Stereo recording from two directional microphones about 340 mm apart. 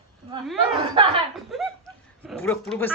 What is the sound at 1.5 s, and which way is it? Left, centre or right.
Chuckle, centre.